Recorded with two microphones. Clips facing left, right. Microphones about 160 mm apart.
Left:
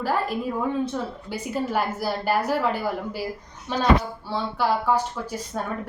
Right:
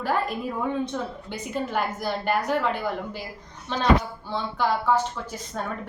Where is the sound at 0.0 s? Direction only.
Centre (ahead or behind).